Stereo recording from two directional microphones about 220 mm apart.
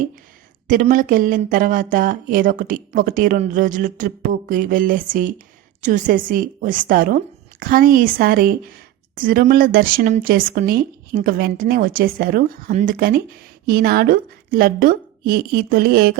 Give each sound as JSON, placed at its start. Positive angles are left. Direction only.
{"t": 0.7, "sound": "a woman's voice", "side_deg": -35}